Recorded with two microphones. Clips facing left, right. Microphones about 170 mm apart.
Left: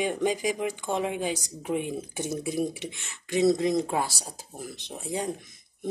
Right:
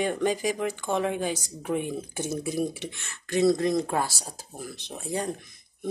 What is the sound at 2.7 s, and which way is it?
Speech, 15° left (ahead or behind).